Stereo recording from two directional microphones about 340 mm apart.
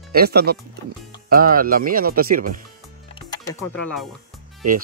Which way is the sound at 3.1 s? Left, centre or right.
Centre.